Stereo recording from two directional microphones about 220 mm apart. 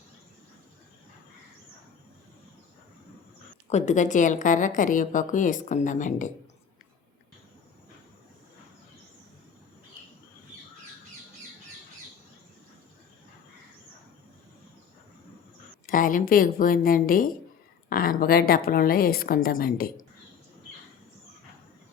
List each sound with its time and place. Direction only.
3.7 s a woman's voice: 30° left (ahead or behind)
15.9 s a woman's voice: 40° left (ahead or behind)